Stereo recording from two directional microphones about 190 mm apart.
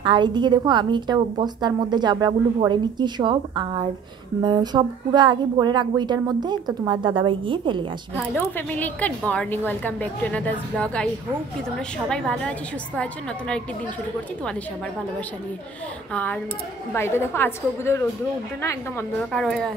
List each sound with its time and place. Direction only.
0.0 s a woman's voice: 25° right (ahead or behind)
8.2 s a woman's voice: 10° left (ahead or behind)
12.1 s a woman's voice: 5° left (ahead or behind)
16.1 s a woman's voice: 10° left (ahead or behind)
19.3 s a woman's voice: 5° left (ahead or behind)